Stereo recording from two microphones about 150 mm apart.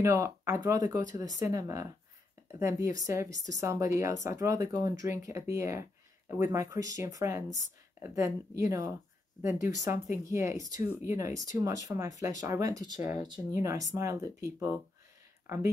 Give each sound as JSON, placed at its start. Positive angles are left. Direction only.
{"t": 0.0, "sound": "speech", "side_deg": -20}
{"t": 15.4, "sound": "speech", "side_deg": -20}